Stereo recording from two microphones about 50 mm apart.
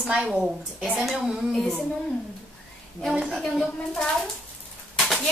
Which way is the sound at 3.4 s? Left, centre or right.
Centre.